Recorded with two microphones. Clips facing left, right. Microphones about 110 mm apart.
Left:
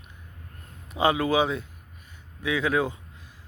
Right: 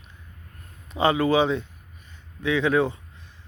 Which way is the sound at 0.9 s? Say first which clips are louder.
Right 2 dB; 10° left (ahead or behind).